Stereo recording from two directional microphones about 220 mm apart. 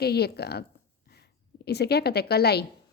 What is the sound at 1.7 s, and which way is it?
Speech, 45° left (ahead or behind).